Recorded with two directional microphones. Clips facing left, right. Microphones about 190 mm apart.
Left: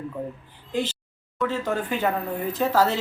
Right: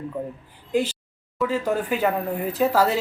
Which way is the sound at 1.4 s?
5° right (ahead or behind).